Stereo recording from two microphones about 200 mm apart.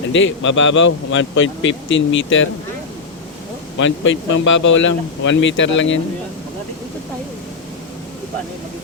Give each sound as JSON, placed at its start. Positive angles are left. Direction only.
{"t": 0.1, "sound": "a man's voice", "side_deg": 70}
{"t": 3.8, "sound": "a man's voice", "side_deg": 70}